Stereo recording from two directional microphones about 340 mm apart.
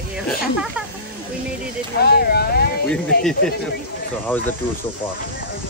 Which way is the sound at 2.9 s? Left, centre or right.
Centre.